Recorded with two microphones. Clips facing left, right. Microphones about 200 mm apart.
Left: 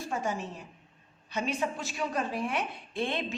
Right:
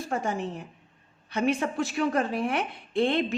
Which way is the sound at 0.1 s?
55° right (ahead or behind).